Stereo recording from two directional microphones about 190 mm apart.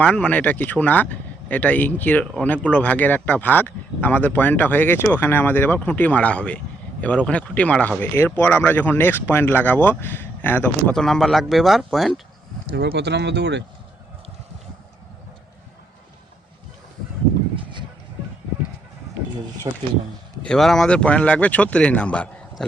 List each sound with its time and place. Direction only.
0.0 s speech: 5° left (ahead or behind)
12.7 s speech: 60° right (ahead or behind)
19.7 s speech: 20° right (ahead or behind)
20.4 s speech: 5° left (ahead or behind)